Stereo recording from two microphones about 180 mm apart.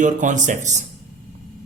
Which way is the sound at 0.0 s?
45° right (ahead or behind).